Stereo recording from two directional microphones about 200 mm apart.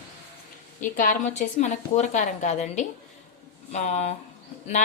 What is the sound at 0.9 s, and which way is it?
Speech, 40° left (ahead or behind).